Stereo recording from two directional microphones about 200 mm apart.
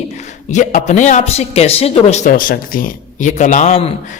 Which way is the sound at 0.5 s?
40° left (ahead or behind).